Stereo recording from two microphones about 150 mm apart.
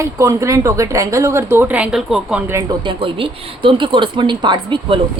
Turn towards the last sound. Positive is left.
turn(degrees=-30)  # may be behind; listen again after turning